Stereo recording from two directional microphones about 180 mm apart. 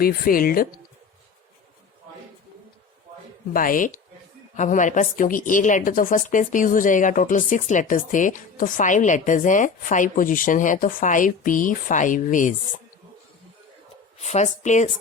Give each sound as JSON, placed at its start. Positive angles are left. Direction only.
{"t": 0.0, "sound": "a woman's voice", "side_deg": 55}
{"t": 3.5, "sound": "a woman's voice", "side_deg": 50}
{"t": 14.2, "sound": "speech", "side_deg": 40}